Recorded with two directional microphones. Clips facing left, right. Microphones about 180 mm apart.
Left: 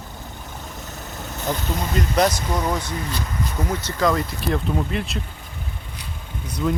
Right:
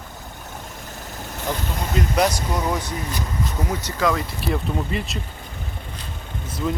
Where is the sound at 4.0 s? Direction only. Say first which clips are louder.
Left 2 dB; centre (ahead or behind).